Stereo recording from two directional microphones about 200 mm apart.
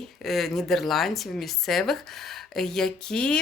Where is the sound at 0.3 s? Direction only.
Centre (ahead or behind).